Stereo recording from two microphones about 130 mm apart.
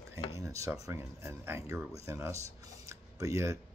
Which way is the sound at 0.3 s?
25° right (ahead or behind).